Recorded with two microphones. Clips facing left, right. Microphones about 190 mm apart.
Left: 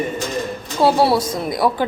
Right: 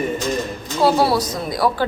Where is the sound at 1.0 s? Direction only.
25° left (ahead or behind).